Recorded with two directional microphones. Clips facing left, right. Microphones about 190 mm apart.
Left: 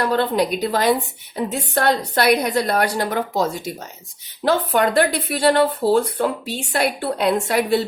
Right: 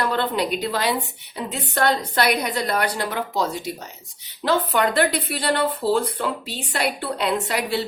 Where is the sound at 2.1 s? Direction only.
45° left (ahead or behind).